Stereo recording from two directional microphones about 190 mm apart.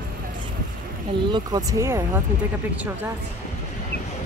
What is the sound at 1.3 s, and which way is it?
Speech, 20° right (ahead or behind).